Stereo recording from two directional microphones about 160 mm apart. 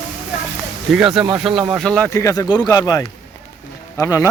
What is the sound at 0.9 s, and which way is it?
Speech, 5° right (ahead or behind).